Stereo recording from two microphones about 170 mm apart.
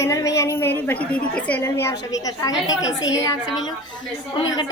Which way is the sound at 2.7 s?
90° left.